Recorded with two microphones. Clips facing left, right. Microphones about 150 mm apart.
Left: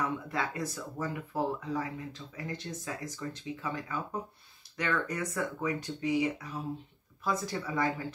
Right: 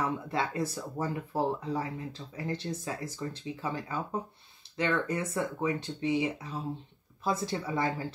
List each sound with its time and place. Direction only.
0.0 s speech: 30° right (ahead or behind)